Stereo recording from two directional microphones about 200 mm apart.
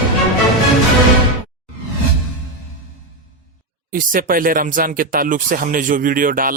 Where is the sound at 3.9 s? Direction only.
45° right (ahead or behind).